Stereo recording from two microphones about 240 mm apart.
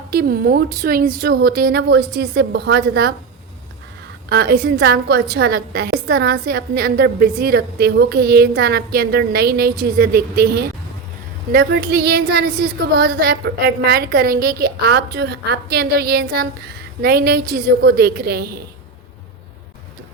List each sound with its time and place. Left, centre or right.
0.1 s a woman's voice: right
4.3 s a woman's voice: right